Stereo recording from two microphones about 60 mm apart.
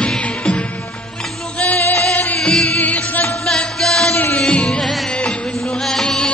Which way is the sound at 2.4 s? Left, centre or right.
Centre.